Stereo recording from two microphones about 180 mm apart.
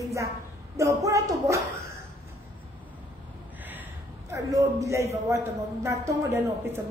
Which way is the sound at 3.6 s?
10° right (ahead or behind).